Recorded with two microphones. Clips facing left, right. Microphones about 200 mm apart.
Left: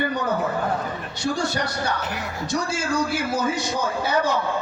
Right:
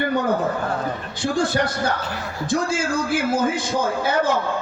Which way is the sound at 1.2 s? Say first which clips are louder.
Right 4 dB; 50° right (ahead or behind).